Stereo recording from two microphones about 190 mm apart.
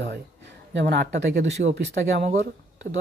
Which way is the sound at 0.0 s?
65° right (ahead or behind).